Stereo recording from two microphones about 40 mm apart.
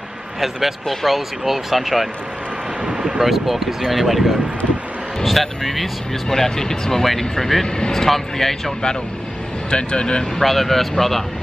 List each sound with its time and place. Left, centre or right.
0.4 s speech: centre
3.2 s speech: centre
9.7 s speech: left
10.4 s speech: centre